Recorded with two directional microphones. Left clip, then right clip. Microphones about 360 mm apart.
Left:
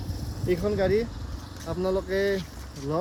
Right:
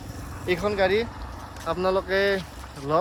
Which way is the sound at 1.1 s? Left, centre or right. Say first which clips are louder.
Right 4 dB; centre.